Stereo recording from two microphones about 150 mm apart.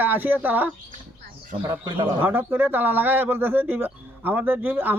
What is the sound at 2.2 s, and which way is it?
Speech, 15° right (ahead or behind).